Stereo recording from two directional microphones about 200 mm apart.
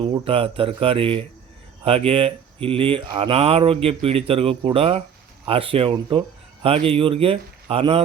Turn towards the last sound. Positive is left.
turn(degrees=-30)  # may be behind; listen again after turning